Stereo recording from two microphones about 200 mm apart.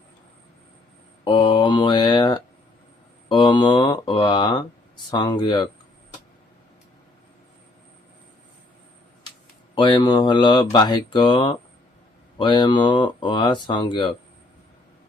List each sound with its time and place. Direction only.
1.2 s speech: 25° left (ahead or behind)
9.7 s speech: 25° left (ahead or behind)